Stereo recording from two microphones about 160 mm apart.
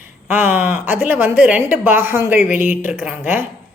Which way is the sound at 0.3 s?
10° right (ahead or behind).